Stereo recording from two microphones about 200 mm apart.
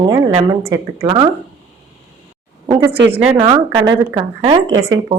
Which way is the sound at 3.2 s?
25° right (ahead or behind).